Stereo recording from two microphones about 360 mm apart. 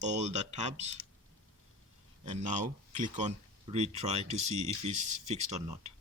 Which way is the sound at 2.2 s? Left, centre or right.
Centre.